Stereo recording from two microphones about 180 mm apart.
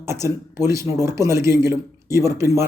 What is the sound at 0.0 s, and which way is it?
A man's voice, 15° right (ahead or behind).